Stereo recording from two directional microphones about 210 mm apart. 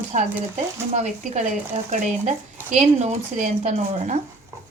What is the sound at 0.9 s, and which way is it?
A woman's voice, 30° right (ahead or behind).